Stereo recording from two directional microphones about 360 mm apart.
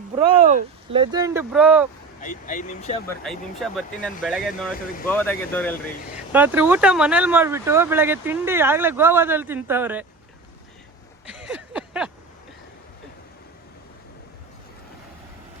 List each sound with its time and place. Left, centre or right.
0.2 s speech: centre
2.2 s speech: left
3.1 s speech: centre
11.4 s a sound: centre